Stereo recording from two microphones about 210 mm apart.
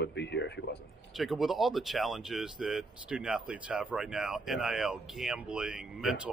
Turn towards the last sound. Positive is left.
turn(degrees=-5)  # may be behind; listen again after turning